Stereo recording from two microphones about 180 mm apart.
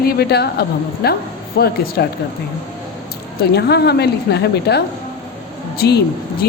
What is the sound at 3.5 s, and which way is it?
A woman's voice, 65° left (ahead or behind).